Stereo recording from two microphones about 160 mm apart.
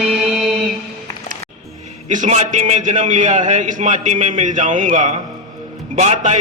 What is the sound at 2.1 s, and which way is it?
A man's voice, 50° right (ahead or behind).